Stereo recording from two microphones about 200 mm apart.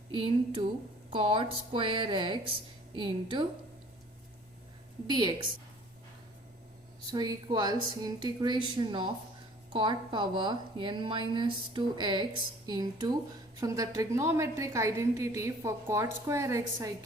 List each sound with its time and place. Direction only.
0.1 s a woman's voice: 25° right (ahead or behind)
5.0 s a woman's voice: 20° right (ahead or behind)
7.1 s a woman's voice: 20° right (ahead or behind)